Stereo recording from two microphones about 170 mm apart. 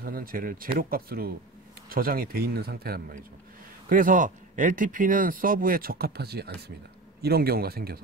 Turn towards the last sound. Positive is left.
turn(degrees=-65)  # may be behind; listen again after turning